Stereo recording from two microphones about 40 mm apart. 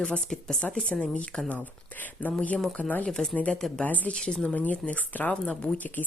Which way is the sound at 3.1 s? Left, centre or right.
Centre.